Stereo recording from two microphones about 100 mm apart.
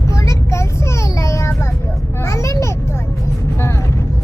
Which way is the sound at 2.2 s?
30° left (ahead or behind).